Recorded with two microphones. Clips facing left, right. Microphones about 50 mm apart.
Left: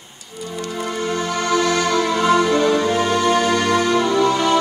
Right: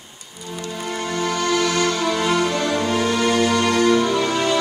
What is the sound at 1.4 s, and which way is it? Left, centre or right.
Music, left.